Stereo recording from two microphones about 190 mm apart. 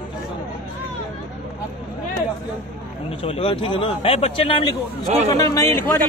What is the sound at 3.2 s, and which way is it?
A man's voice, 30° left (ahead or behind).